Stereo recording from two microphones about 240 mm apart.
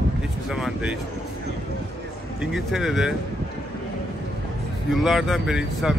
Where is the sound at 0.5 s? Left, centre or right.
Centre.